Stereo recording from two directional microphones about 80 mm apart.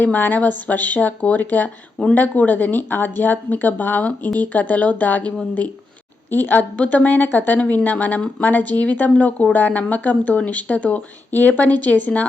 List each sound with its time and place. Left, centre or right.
0.0 s speech: left